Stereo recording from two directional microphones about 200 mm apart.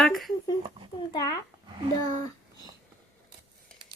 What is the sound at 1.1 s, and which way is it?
Speech, 20° left (ahead or behind).